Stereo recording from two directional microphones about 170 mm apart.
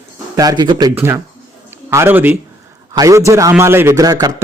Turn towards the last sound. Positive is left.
turn(degrees=-20)  # may be behind; listen again after turning